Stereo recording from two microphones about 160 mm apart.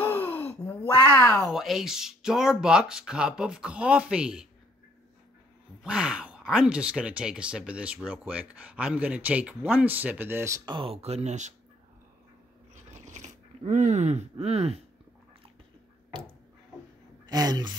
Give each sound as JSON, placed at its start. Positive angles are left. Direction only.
{"t": 0.0, "sound": "gasp", "side_deg": 10}
{"t": 1.3, "sound": "speech", "side_deg": 0}
{"t": 5.9, "sound": "speech", "side_deg": -5}
{"t": 12.9, "sound": "a sound", "side_deg": -45}
{"t": 17.3, "sound": "speech", "side_deg": -25}